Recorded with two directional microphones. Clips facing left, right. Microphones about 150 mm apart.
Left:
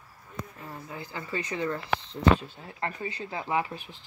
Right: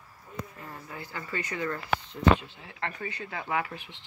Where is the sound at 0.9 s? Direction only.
20° left (ahead or behind).